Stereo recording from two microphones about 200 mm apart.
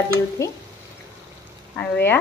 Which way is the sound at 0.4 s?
15° left (ahead or behind).